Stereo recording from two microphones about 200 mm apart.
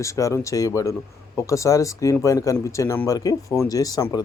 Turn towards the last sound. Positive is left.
turn(degrees=20)  # may be behind; listen again after turning